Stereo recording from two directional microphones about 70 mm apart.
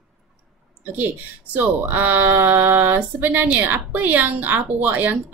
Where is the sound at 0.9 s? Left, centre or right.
Right.